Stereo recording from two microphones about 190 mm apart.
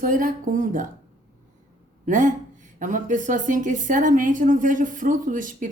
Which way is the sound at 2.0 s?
40° right (ahead or behind).